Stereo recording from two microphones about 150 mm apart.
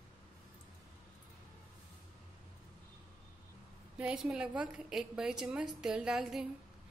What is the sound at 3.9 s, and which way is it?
A woman's voice, 5° right (ahead or behind).